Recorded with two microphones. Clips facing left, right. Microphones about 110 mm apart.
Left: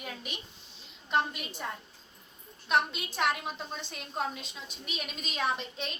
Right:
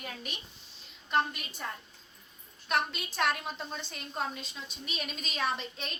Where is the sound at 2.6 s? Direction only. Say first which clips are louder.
Left 3 dB; 20° left (ahead or behind).